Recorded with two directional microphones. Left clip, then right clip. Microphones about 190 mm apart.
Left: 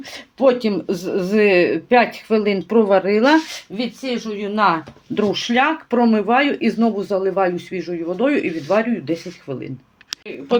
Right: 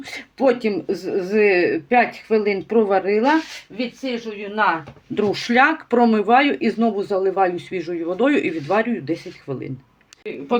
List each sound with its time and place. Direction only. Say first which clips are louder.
0.1 s speech: left 2 dB; 5° left (ahead or behind)
0.6 s speech: left 1 dB; 20° left (ahead or behind)
3.8 s speech: left 1 dB; 60° left (ahead or behind)
5.2 s speech: right 1 dB; 5° right (ahead or behind)